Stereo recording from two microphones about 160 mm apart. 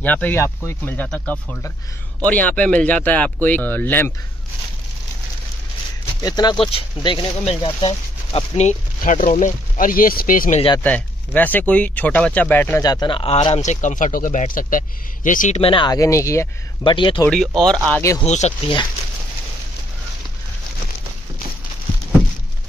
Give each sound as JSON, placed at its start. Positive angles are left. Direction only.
{"t": 0.0, "sound": "speech", "side_deg": 10}
{"t": 6.2, "sound": "speech", "side_deg": 25}
{"t": 10.8, "sound": "speech", "side_deg": 10}
{"t": 12.8, "sound": "speech", "side_deg": 25}
{"t": 13.6, "sound": "speech", "side_deg": 50}
{"t": 15.6, "sound": "speech", "side_deg": 30}
{"t": 16.8, "sound": "speech", "side_deg": 30}
{"t": 17.6, "sound": "speech", "side_deg": 5}
{"t": 18.2, "sound": "speech", "side_deg": 45}